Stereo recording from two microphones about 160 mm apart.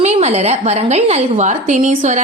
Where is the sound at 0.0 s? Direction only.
40° right (ahead or behind).